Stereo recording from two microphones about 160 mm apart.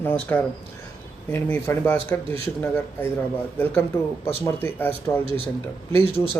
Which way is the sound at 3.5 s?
10° left (ahead or behind).